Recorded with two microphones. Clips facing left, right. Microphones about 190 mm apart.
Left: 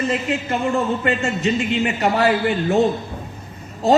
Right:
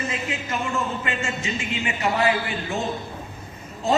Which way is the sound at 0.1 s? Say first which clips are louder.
Left 7 dB; 35° left (ahead or behind).